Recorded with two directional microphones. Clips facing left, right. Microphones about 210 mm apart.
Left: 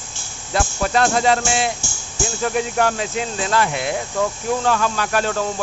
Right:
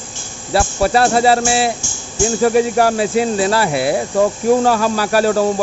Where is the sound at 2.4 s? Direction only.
35° right (ahead or behind).